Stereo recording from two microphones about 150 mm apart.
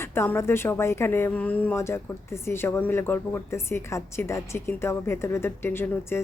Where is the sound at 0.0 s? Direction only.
15° left (ahead or behind).